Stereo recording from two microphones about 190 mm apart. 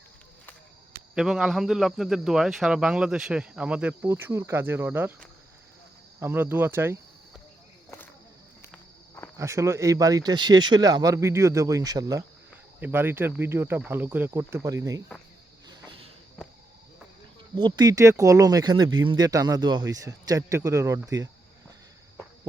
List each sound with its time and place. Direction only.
1.1 s speech: 5° right (ahead or behind)
6.1 s speech: 10° right (ahead or behind)
7.9 s snake: 10° left (ahead or behind)
9.4 s speech: 15° right (ahead or behind)
15.6 s cricket: 25° right (ahead or behind)
17.6 s speech: 25° right (ahead or behind)